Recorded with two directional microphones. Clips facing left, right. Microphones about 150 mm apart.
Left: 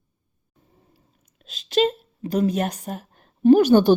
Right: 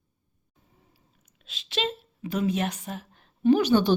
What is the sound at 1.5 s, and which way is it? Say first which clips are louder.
A woman's voice: left 10 dB; 45° left (ahead or behind).